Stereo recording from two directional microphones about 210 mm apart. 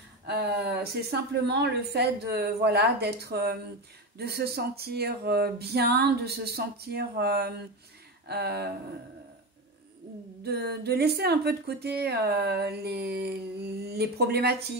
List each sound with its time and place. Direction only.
0.3 s speech: 50° right (ahead or behind)
10.4 s speech: 50° right (ahead or behind)